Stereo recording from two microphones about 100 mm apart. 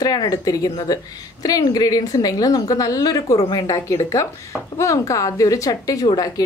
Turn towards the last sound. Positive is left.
turn(degrees=40)  # may be behind; listen again after turning